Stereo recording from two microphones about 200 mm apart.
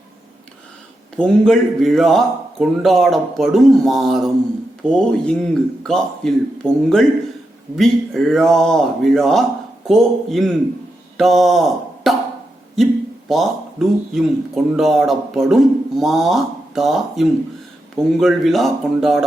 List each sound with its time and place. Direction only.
1.1 s a man's voice: 5° left (ahead or behind)